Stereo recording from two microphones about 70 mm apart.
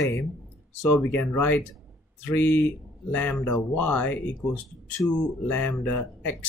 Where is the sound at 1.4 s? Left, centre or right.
Left.